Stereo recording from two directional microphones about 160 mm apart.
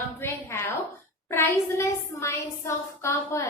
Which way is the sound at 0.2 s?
15° left (ahead or behind).